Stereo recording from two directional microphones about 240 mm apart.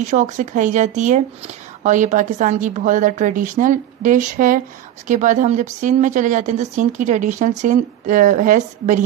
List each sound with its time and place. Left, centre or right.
0.0 s speech: right